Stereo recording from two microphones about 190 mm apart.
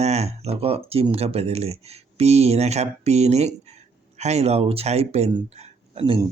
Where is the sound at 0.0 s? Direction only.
35° right (ahead or behind).